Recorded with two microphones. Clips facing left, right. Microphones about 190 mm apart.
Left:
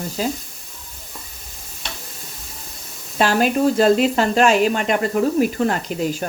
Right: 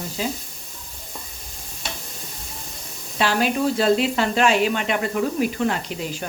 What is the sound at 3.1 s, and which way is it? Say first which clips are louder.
Speech: left 4 dB; 45° left (ahead or behind).